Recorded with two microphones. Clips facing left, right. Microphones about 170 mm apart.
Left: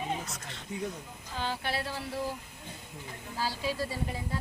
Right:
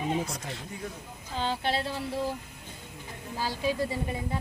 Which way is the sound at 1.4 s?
25° right (ahead or behind).